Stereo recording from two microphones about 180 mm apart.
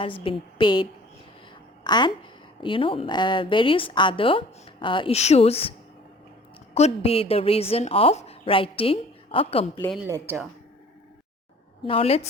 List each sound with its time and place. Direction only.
0.0 s a woman's voice: 30° left (ahead or behind)
6.7 s a woman's voice: 35° left (ahead or behind)
10.1 s speech: 15° right (ahead or behind)
11.9 s a woman's voice: 35° left (ahead or behind)